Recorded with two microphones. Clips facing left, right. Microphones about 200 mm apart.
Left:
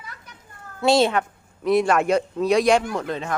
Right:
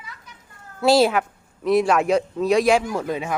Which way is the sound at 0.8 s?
5° right (ahead or behind).